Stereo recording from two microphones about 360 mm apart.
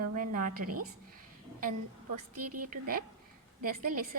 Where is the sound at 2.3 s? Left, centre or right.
Right.